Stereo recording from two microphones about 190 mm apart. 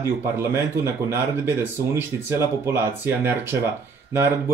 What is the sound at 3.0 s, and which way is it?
Speech, 10° right (ahead or behind).